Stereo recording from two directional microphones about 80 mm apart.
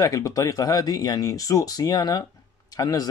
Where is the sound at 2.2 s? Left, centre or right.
Left.